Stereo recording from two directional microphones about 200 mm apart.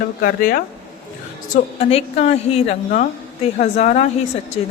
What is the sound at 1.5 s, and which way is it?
A man's voice, 30° left (ahead or behind).